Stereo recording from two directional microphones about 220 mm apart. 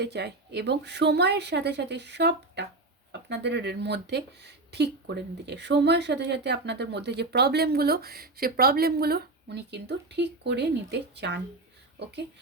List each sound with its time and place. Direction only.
0.0 s speech: 50° right (ahead or behind)